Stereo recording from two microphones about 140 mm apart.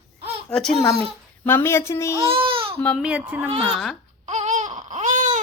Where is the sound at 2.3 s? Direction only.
40° right (ahead or behind).